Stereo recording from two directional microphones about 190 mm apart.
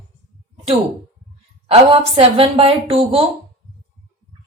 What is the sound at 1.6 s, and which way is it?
Speech, 30° right (ahead or behind).